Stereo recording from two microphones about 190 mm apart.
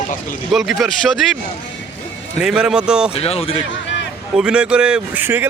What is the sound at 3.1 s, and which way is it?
Speech, 30° left (ahead or behind).